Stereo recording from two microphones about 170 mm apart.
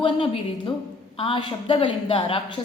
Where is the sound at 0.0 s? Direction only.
30° left (ahead or behind).